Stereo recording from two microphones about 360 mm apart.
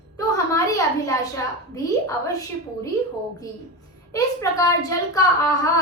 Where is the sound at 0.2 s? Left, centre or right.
Centre.